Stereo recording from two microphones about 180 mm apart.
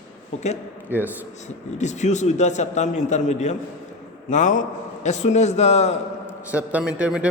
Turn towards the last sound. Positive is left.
turn(degrees=-5)  # may be behind; listen again after turning